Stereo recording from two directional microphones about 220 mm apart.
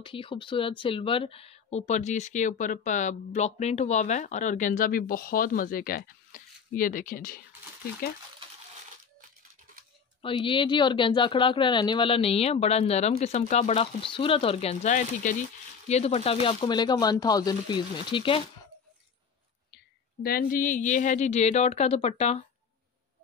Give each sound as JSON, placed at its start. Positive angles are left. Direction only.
{"t": 0.0, "sound": "speech", "side_deg": 25}
{"t": 10.2, "sound": "speech", "side_deg": 20}
{"t": 20.2, "sound": "speech", "side_deg": 40}